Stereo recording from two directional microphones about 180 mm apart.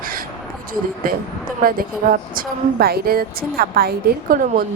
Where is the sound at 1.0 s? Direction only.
55° right (ahead or behind).